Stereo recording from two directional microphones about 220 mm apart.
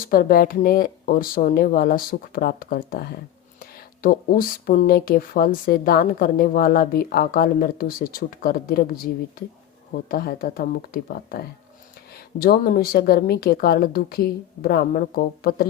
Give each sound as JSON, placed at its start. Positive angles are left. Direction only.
{"t": 0.1, "sound": "speech", "side_deg": 40}
{"t": 10.1, "sound": "speech", "side_deg": 40}